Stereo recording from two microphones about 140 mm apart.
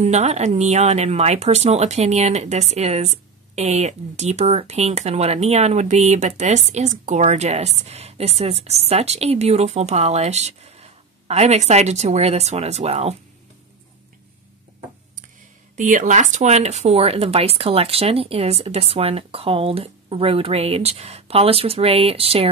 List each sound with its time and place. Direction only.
0.0 s speech: 50° right (ahead or behind)
15.7 s speech: 65° right (ahead or behind); by 22.5 s 45° right (ahead or behind)